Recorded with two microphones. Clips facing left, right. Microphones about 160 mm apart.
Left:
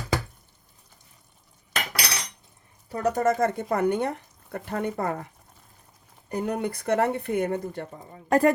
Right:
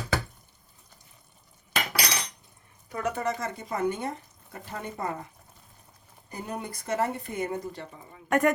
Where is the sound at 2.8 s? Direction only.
35° left (ahead or behind); by 5.2 s 60° left (ahead or behind).